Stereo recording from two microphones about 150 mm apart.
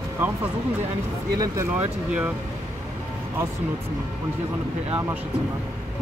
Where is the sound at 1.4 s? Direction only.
20° right (ahead or behind).